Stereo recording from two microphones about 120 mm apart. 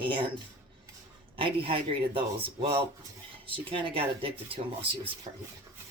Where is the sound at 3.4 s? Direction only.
45° right (ahead or behind).